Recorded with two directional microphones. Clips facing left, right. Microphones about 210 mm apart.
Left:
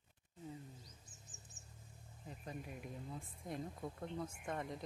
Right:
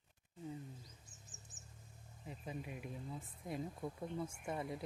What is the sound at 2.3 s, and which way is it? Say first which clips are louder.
Speech: right 2 dB; 5° right (ahead or behind).